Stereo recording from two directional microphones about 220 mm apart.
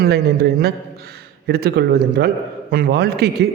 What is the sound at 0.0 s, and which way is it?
A man's voice, 45° right (ahead or behind).